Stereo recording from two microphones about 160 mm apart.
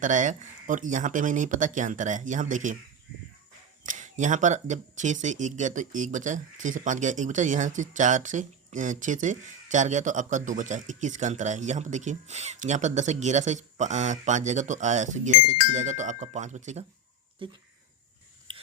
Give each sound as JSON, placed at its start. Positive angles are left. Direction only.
{"t": 0.0, "sound": "speech", "side_deg": -50}
{"t": 3.8, "sound": "speech", "side_deg": -50}
{"t": 17.4, "sound": "speech", "side_deg": -35}
{"t": 18.5, "sound": "a sound", "side_deg": -30}